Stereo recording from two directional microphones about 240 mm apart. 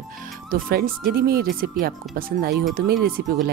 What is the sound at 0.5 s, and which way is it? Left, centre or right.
Speech, right.